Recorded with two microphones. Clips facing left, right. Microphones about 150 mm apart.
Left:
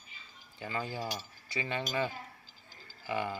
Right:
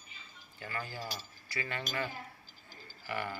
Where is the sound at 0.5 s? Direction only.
15° left (ahead or behind).